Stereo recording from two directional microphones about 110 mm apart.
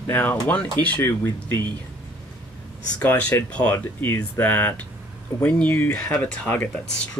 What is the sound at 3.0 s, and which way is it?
Speech, 15° left (ahead or behind).